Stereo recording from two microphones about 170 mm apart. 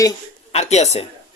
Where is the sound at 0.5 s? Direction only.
40° left (ahead or behind).